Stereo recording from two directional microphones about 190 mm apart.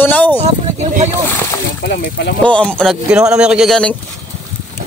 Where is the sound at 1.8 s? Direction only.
60° left (ahead or behind).